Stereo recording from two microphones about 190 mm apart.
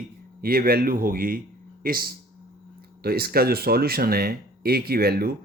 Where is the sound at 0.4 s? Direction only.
50° right (ahead or behind).